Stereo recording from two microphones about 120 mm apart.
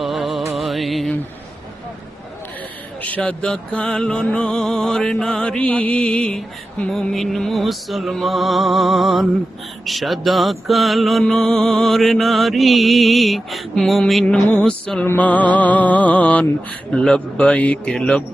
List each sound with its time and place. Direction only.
0.0 s music: centre (ahead or behind)
3.0 s music: 10° left (ahead or behind)
15.0 s mantra: 15° left (ahead or behind)